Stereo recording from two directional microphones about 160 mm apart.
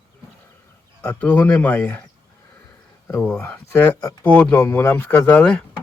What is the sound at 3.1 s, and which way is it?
Speech, 10° left (ahead or behind).